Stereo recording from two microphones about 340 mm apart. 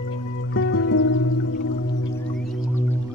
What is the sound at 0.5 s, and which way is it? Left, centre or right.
Music, left.